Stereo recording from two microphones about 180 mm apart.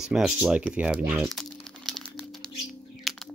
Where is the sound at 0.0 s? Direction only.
5° right (ahead or behind).